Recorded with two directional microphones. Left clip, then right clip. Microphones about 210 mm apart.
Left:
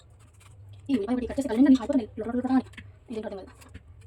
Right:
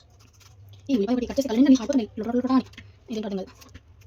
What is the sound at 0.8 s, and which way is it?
A woman's voice, 40° right (ahead or behind).